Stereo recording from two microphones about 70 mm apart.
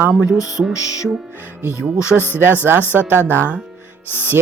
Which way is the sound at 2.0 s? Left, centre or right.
Left.